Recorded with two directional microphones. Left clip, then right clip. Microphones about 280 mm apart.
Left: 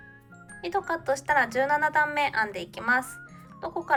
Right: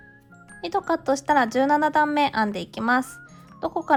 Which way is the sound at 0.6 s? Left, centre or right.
Centre.